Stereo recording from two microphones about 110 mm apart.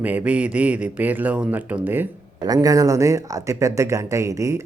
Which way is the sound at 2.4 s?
35° right (ahead or behind).